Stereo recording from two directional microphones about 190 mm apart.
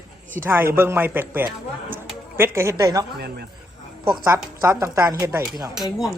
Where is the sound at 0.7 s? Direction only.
10° right (ahead or behind).